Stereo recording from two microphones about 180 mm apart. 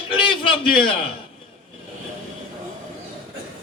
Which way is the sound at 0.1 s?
30° left (ahead or behind).